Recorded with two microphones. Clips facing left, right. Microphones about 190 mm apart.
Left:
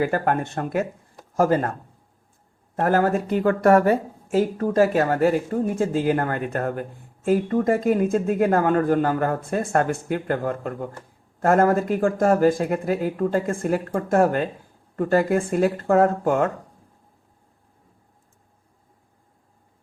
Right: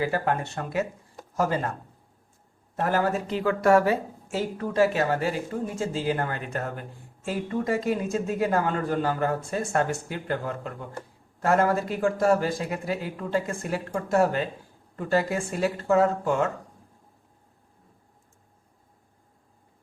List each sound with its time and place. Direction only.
0.0 s speech: 50° left (ahead or behind)
2.7 s speech: 50° left (ahead or behind)